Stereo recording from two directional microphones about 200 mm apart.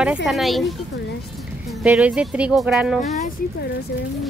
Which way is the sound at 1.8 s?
5° right (ahead or behind).